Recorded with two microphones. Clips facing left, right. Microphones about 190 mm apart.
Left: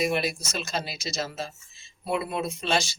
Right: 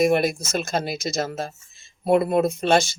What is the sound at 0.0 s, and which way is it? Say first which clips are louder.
Speech: right 7 dB; 50° right (ahead or behind).